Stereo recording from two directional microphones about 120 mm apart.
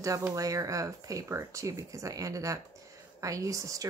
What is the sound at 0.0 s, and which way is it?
Speech, 25° right (ahead or behind).